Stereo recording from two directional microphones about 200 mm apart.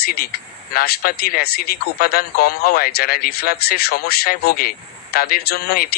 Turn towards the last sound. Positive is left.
turn(degrees=50)  # may be behind; listen again after turning